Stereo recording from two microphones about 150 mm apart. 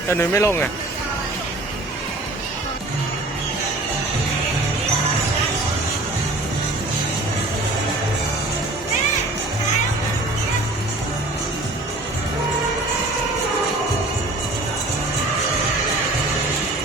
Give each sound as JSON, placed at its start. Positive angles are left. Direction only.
{"t": 0.1, "sound": "speech", "side_deg": 15}